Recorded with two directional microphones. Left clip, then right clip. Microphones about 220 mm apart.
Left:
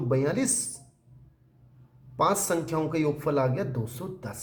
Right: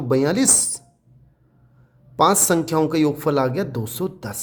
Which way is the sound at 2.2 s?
50° right (ahead or behind).